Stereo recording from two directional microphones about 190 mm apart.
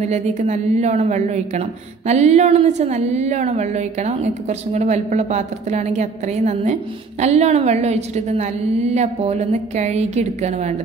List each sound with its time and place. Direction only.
0.0 s a woman's voice: 35° right (ahead or behind)